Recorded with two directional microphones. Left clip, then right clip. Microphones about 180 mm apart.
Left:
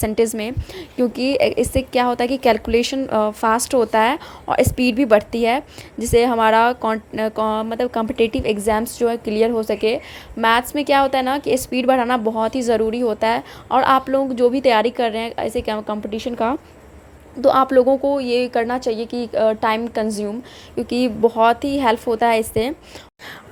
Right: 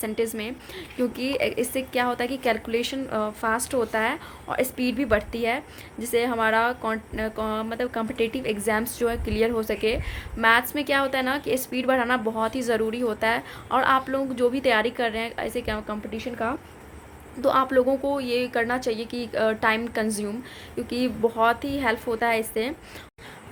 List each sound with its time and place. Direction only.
0.0 s a woman's voice: 35° left (ahead or behind)
17.4 s a woman's voice: 30° left (ahead or behind)
20.7 s a woman's voice: 30° left (ahead or behind)